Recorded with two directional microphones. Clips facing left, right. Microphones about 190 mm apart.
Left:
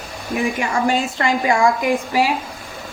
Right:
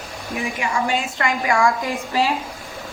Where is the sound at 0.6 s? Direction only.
40° left (ahead or behind); by 1.9 s 20° left (ahead or behind).